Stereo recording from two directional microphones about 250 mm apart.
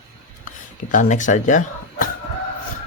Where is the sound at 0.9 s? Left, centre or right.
Left.